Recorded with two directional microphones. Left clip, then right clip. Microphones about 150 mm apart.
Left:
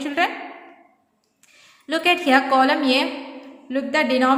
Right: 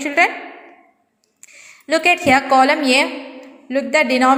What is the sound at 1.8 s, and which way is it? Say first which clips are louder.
A woman's voice: right 4 dB; 30° right (ahead or behind).